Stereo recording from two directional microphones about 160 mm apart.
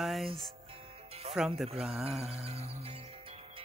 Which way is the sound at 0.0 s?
Centre (ahead or behind).